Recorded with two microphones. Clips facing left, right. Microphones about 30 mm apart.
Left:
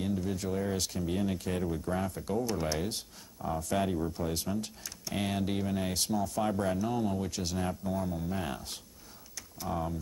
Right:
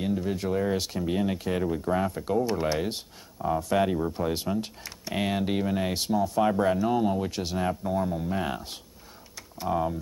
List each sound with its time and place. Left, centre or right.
0.0 s speech: right